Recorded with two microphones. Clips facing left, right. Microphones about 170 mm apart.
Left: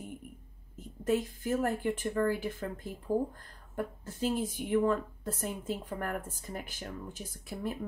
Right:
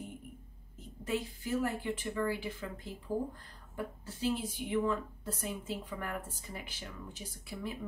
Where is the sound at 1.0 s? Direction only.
50° left (ahead or behind).